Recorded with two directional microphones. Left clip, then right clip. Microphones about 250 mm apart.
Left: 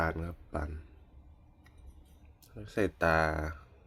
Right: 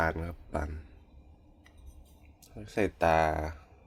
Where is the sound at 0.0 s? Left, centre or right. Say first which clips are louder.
Right 3 dB; centre.